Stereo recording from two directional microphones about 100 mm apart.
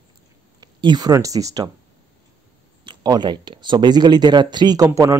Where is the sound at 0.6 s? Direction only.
45° right (ahead or behind).